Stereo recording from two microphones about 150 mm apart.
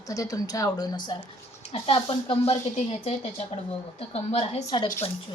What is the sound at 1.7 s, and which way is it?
Speech, 40° left (ahead or behind).